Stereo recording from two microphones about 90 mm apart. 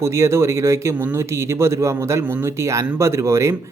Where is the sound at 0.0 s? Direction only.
30° right (ahead or behind).